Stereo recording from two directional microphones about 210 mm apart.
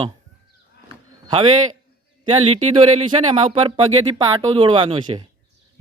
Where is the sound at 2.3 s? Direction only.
30° right (ahead or behind).